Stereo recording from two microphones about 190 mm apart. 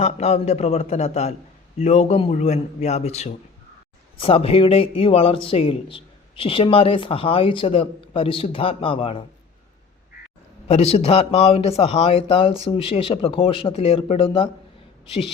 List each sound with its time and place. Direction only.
0.0 s a man's voice: 35° left (ahead or behind)
10.7 s a man's voice: 35° left (ahead or behind)